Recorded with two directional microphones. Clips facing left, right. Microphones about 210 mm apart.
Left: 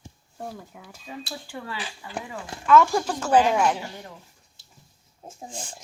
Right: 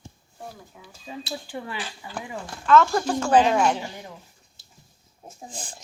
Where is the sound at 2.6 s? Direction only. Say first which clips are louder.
Even; 10° left (ahead or behind).